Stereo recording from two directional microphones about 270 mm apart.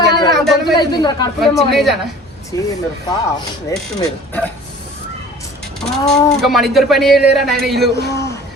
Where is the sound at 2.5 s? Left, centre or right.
Centre.